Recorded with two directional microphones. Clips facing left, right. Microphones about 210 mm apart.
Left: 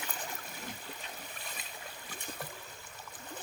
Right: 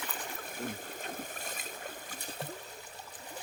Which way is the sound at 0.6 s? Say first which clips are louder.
Right 6 dB; 50° right (ahead or behind).